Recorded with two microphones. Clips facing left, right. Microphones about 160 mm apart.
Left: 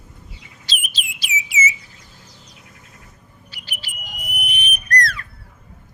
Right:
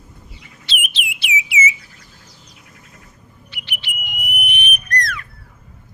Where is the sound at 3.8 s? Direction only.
35° left (ahead or behind).